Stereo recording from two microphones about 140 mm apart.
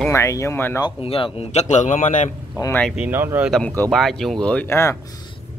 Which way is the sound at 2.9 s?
10° right (ahead or behind).